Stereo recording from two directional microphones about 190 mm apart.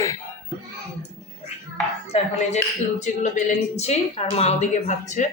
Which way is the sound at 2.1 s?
35° left (ahead or behind).